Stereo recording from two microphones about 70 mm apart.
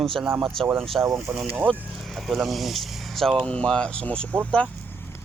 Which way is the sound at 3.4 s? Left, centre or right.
Centre.